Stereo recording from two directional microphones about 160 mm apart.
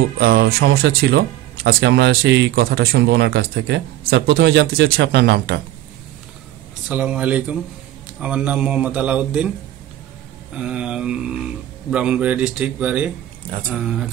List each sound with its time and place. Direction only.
0.2 s speech: 85° right
6.9 s a man's voice: 10° right (ahead or behind)
10.5 s mantra: 5° right (ahead or behind)
11.9 s a man's voice: 5° right (ahead or behind)
13.7 s mantra: 5° right (ahead or behind)